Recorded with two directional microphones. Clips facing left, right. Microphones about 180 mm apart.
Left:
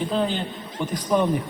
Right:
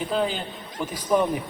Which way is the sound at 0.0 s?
5° right (ahead or behind).